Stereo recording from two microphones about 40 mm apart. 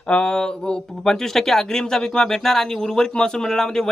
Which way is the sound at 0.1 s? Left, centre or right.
Left.